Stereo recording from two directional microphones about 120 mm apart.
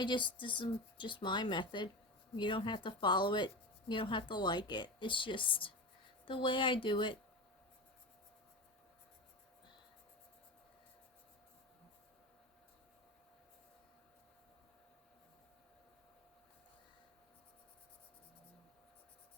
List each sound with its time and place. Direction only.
0.0 s speech: 40° left (ahead or behind)